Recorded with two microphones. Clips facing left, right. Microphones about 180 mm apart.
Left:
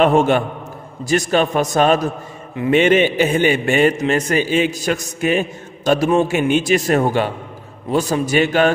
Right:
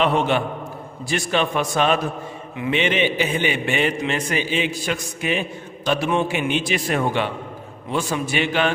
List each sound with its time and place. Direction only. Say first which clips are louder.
0.0 s a man's voice: left 6 dB; 45° left (ahead or behind)